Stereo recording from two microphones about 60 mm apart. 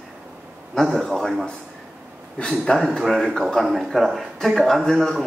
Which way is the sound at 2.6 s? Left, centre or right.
Centre.